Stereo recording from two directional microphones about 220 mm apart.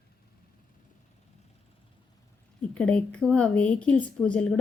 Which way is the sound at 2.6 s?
5° left (ahead or behind).